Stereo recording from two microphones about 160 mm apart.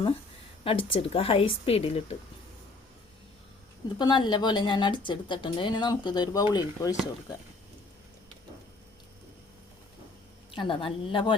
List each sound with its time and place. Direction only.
0.6 s a woman's voice: 35° left (ahead or behind)
3.9 s a woman's voice: 30° left (ahead or behind)
10.5 s a woman's voice: 30° left (ahead or behind)